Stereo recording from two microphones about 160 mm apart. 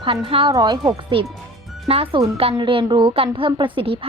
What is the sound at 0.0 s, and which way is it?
A woman's voice, 35° right (ahead or behind).